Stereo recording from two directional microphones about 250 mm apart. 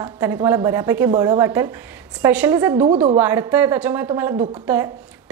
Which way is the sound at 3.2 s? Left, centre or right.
Centre.